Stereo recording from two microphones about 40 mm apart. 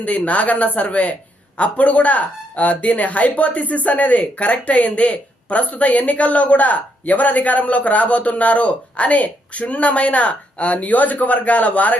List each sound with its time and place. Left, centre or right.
0.0 s speech: left